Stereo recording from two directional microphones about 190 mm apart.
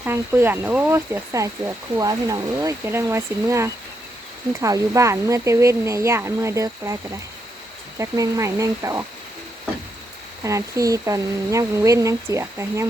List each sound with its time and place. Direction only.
0.0 s speech: 10° right (ahead or behind)
10.4 s speech: 15° right (ahead or behind)